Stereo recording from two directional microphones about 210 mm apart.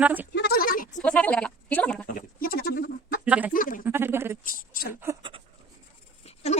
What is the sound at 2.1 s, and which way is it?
Bird, 45° left (ahead or behind).